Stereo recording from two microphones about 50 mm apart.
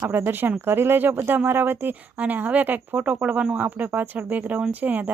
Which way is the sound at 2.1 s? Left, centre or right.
Right.